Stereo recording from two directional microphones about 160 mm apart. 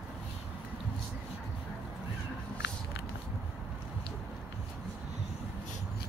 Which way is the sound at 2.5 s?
90° left.